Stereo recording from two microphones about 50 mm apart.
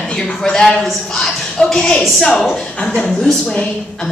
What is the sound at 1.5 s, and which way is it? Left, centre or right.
A woman's voice, centre.